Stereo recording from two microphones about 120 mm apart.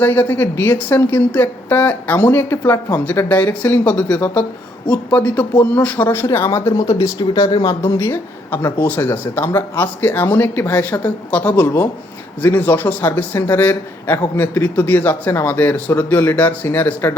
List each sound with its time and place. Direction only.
0.0 s a man's voice: 15° left (ahead or behind)